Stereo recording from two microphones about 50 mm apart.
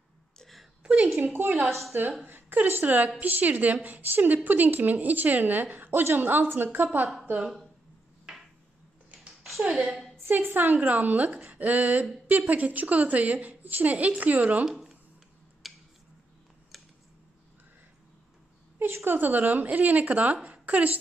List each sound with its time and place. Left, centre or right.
0.4 s whimper: centre
0.8 s a sound: right
1.2 s a woman's voice: right
9.4 s a sound: centre
9.7 s a woman's voice: centre
10.3 s a woman's voice: right
15.6 s tick-tock: centre
19.0 s a woman's voice: right